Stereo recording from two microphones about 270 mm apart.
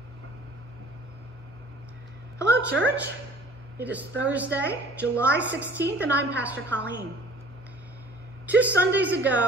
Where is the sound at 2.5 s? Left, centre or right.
Right.